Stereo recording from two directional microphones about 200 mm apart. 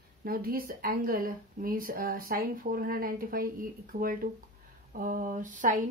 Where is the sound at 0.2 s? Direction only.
50° right (ahead or behind).